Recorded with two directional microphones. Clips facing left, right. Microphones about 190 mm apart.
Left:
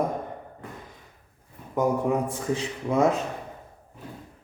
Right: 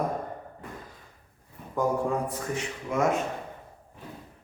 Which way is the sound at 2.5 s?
35° left (ahead or behind).